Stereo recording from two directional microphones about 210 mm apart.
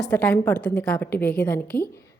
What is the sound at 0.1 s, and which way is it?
A woman's voice, 10° left (ahead or behind).